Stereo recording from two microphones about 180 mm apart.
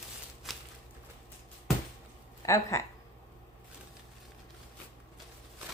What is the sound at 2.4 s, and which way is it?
Speech, 15° left (ahead or behind).